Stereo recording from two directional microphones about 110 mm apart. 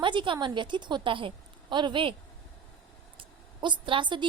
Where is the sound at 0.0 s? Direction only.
45° right (ahead or behind).